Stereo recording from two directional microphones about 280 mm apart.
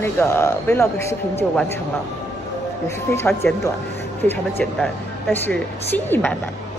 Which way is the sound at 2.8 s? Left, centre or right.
Centre.